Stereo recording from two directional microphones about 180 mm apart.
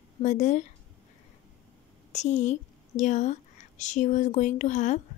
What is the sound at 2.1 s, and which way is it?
A woman's voice, 40° left (ahead or behind).